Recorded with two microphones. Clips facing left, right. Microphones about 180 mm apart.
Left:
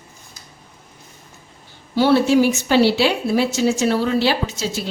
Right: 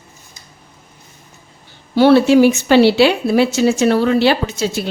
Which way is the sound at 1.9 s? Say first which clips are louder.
Right 5 dB; 70° right (ahead or behind).